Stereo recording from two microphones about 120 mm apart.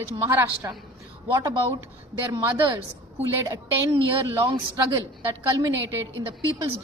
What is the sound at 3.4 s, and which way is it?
Speech, 25° right (ahead or behind).